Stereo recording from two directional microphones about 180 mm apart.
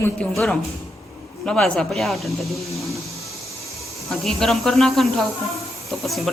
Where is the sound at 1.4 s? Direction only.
5° left (ahead or behind).